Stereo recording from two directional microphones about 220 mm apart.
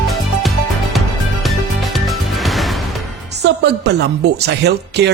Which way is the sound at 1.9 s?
Centre (ahead or behind).